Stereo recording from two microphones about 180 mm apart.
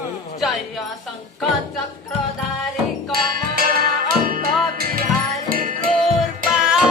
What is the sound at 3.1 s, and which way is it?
Music, 55° right (ahead or behind).